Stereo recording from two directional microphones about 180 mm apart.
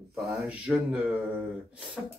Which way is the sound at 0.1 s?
Centre (ahead or behind).